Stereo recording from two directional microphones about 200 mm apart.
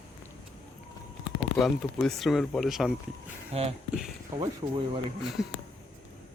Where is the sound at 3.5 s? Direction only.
30° right (ahead or behind).